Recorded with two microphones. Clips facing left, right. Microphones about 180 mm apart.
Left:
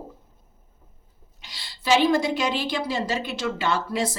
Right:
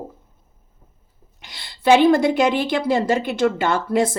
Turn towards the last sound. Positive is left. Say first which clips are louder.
# right 6 dB
turn(degrees=-50)  # may be behind; listen again after turning